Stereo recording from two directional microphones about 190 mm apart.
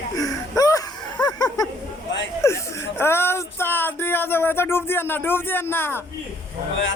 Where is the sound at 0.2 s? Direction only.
20° left (ahead or behind).